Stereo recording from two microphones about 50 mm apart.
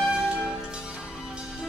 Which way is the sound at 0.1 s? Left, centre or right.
Centre.